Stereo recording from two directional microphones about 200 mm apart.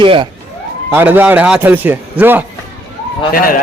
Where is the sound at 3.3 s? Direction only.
45° left (ahead or behind).